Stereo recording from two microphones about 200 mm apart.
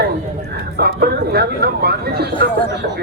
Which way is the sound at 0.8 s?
55° right (ahead or behind).